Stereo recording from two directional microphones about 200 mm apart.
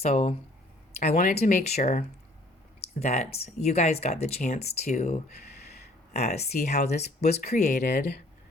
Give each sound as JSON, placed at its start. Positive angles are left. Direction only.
{"t": 0.0, "sound": "speech", "side_deg": 35}
{"t": 7.8, "sound": "speech", "side_deg": 55}